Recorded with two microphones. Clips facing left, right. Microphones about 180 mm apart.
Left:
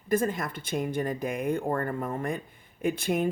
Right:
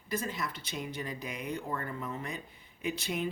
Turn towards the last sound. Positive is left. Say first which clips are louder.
# left 8 dB
turn(degrees=50)  # may be behind; listen again after turning